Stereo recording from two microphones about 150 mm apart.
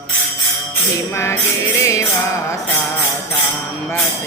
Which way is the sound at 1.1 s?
20° left (ahead or behind).